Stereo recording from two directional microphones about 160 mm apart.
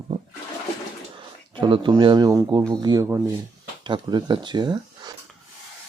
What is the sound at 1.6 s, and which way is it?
Speech, 30° right (ahead or behind).